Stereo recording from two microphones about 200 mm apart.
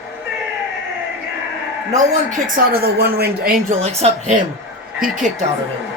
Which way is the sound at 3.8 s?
30° right (ahead or behind).